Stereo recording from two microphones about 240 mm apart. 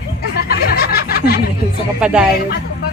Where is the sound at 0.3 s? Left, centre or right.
Left.